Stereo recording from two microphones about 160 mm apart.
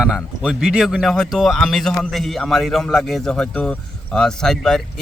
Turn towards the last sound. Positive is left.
turn(degrees=5)  # may be behind; listen again after turning